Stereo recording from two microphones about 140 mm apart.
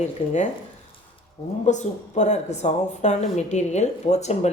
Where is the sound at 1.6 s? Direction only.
55° left (ahead or behind).